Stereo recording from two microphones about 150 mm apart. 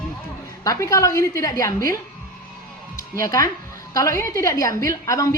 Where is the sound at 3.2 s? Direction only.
20° left (ahead or behind).